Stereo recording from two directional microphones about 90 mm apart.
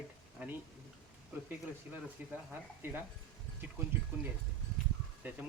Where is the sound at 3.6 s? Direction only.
20° right (ahead or behind).